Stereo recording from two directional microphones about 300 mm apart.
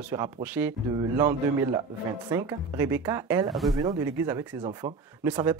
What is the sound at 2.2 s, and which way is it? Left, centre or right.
Speech, centre.